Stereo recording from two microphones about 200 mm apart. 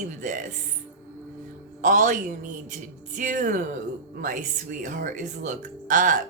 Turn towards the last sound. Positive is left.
turn(degrees=-40)  # may be behind; listen again after turning